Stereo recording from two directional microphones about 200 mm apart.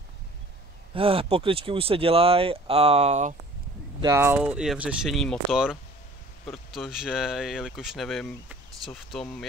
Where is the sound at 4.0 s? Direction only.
15° right (ahead or behind).